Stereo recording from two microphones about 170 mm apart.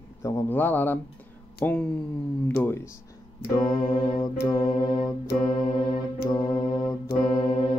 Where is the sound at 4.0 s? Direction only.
25° left (ahead or behind).